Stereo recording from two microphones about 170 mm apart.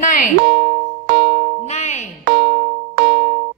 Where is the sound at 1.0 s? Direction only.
75° right (ahead or behind).